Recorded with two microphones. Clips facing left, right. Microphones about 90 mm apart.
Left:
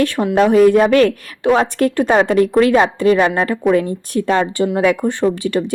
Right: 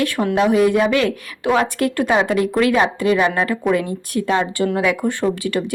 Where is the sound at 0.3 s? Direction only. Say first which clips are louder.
Left 5 dB; 40° left (ahead or behind).